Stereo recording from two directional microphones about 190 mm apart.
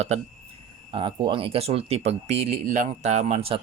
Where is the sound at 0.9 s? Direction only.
25° right (ahead or behind).